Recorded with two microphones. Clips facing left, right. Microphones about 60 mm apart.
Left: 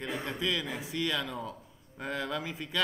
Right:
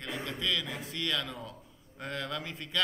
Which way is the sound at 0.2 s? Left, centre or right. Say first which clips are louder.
Right 1 dB; centre.